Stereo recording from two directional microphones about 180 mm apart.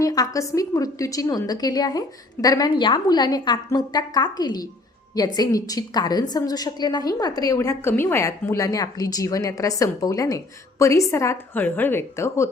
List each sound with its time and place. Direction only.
0.0 s a woman's voice: 20° left (ahead or behind)